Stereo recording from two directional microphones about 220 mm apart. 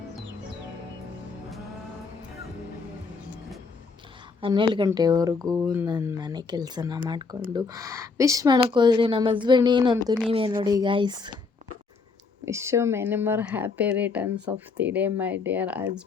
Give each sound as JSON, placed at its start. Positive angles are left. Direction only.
{"t": 4.4, "sound": "speech", "side_deg": -25}
{"t": 12.5, "sound": "speech", "side_deg": -10}